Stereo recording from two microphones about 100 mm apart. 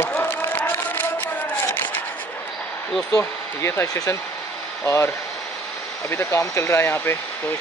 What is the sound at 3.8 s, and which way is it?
Speech, 35° left (ahead or behind).